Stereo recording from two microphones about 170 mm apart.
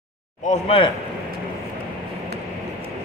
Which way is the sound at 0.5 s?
35° left (ahead or behind).